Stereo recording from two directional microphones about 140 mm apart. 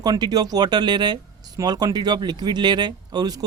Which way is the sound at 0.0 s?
30° right (ahead or behind).